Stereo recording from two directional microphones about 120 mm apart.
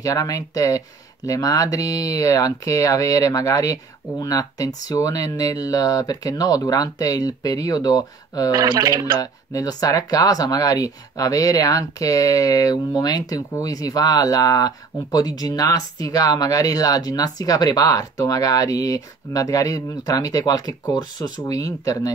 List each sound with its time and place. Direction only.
0.0 s speech: 30° left (ahead or behind)
8.8 s speech: 30° right (ahead or behind)
9.2 s speech: 30° left (ahead or behind)